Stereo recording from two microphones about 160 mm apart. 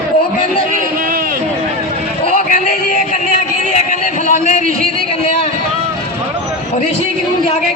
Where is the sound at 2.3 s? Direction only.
55° left (ahead or behind).